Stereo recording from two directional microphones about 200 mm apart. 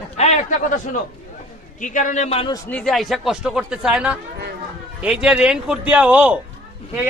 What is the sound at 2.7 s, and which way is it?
A man's voice, centre (ahead or behind).